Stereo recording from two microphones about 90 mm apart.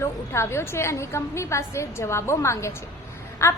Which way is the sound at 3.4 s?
30° left (ahead or behind).